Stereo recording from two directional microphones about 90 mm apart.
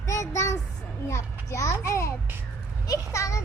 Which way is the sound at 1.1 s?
35° left (ahead or behind).